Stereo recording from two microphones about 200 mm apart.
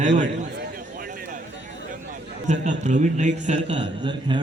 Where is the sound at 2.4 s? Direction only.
35° right (ahead or behind).